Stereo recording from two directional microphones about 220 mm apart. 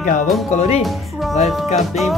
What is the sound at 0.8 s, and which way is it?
Speech, centre (ahead or behind).